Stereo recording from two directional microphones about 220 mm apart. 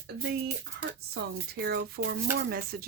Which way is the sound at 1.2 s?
45° right (ahead or behind).